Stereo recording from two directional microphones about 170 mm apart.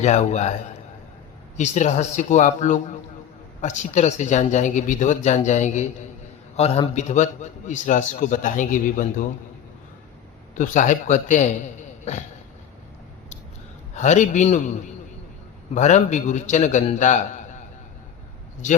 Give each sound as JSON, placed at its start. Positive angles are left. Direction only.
{"t": 0.0, "sound": "a man's voice", "side_deg": 40}
{"t": 1.5, "sound": "speech", "side_deg": 45}
{"t": 10.5, "sound": "speech", "side_deg": 50}
{"t": 13.9, "sound": "speech", "side_deg": 45}
{"t": 15.7, "sound": "speech", "side_deg": 45}